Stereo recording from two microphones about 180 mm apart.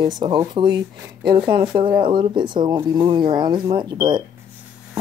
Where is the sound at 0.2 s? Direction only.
25° right (ahead or behind).